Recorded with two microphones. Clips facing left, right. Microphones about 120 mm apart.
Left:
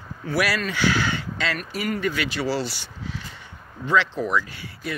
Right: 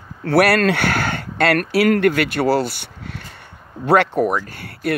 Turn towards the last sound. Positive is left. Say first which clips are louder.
# right 8 dB
turn(degrees=-60)  # may be behind; listen again after turning